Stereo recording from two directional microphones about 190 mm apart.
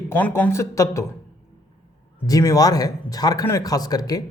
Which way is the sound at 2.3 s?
20° left (ahead or behind).